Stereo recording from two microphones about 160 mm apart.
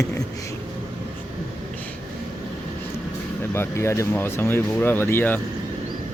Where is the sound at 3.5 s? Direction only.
15° left (ahead or behind).